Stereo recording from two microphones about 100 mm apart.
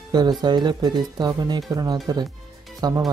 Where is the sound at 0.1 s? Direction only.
45° right (ahead or behind).